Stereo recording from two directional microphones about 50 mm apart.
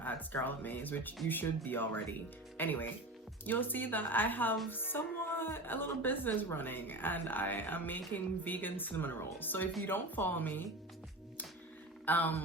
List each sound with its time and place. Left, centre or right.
0.0 s music: left
0.4 s speech: left
12.0 s speech: left